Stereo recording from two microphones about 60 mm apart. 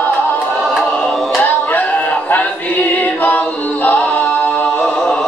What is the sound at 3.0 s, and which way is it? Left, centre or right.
A capella, left.